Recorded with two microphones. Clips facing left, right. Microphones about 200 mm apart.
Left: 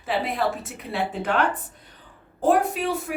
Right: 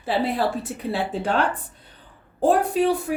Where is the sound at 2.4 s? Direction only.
35° right (ahead or behind).